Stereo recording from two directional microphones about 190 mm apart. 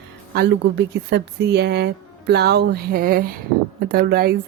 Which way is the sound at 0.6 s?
65° right (ahead or behind).